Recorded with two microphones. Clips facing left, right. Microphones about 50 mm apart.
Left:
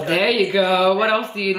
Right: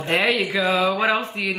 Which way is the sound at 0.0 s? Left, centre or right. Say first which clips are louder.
Left 3 dB; right.